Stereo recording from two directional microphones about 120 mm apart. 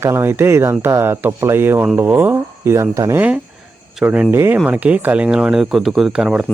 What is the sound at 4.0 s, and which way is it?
Speech, 5° right (ahead or behind).